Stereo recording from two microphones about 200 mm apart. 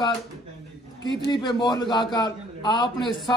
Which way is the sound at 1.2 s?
20° left (ahead or behind).